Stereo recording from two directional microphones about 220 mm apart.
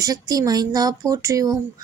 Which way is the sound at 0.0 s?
15° right (ahead or behind).